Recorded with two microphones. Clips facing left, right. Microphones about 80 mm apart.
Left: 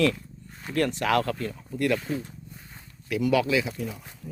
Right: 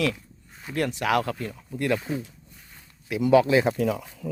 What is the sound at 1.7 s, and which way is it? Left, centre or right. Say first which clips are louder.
Speech: even; centre.